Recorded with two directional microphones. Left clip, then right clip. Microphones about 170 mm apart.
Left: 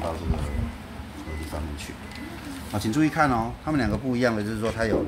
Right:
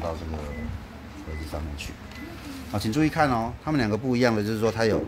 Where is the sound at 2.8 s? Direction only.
45° right (ahead or behind).